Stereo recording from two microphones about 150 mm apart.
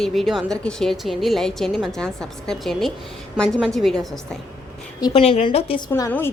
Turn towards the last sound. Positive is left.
turn(degrees=15)  # may be behind; listen again after turning